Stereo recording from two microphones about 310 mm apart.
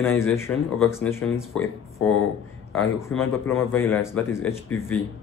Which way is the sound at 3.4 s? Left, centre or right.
Centre.